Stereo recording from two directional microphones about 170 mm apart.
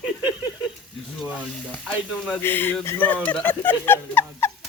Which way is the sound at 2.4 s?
10° left (ahead or behind).